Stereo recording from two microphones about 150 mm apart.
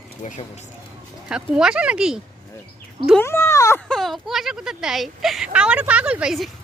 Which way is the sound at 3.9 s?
Centre (ahead or behind).